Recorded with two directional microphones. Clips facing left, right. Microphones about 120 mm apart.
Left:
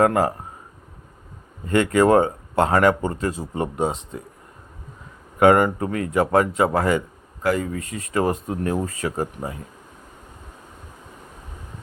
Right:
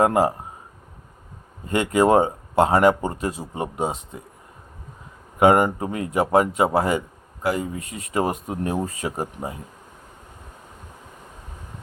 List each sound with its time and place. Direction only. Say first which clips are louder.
0.0 s speech: even; 15° right (ahead or behind)
1.6 s speech: left 2 dB; 15° right (ahead or behind)
5.4 s speech: left 1 dB; 15° right (ahead or behind)